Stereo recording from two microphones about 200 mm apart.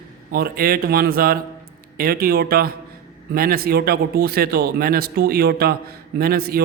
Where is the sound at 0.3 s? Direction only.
50° right (ahead or behind).